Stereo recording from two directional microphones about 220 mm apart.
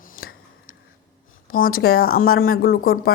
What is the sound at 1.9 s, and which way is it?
A woman's voice, 45° left (ahead or behind).